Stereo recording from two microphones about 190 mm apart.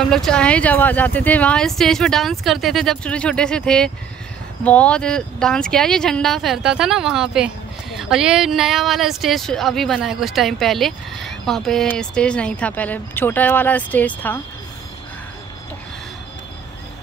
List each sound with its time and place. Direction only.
0.1 s speech: 5° left (ahead or behind)